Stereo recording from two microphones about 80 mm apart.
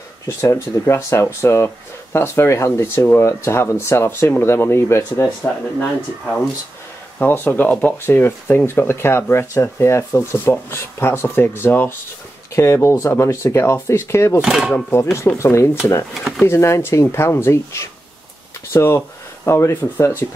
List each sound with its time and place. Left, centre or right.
0.4 s speech: left
5.8 s speech: centre; by 14.4 s left
14.4 s speech: centre
15.3 s speech: left
16.2 s speech: centre
16.4 s speech: left